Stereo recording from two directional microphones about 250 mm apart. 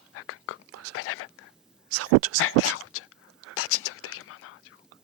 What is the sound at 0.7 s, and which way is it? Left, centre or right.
Whispering, right.